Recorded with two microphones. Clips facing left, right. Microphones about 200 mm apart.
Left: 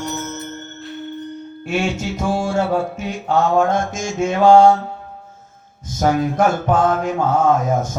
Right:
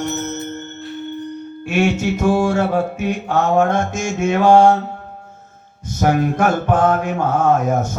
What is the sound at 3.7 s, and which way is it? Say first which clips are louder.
Mantra: right 1 dB; 60° right (ahead or behind).